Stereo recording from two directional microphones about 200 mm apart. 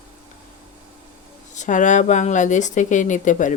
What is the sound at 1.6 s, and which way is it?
Speech, 40° left (ahead or behind).